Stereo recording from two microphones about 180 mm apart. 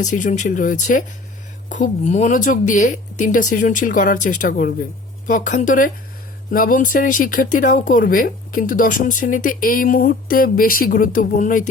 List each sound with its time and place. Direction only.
0.0 s speech: 45° left (ahead or behind)